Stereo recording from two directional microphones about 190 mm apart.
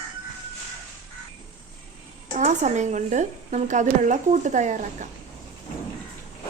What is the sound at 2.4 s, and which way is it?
Speech, 40° right (ahead or behind).